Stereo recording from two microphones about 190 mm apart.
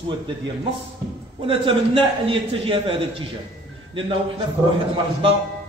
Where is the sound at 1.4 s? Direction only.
30° right (ahead or behind).